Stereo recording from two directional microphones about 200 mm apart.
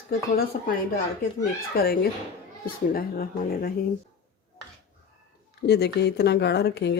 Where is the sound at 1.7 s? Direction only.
50° left (ahead or behind).